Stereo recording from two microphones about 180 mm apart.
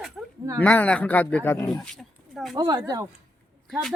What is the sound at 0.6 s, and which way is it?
Speech, 10° left (ahead or behind).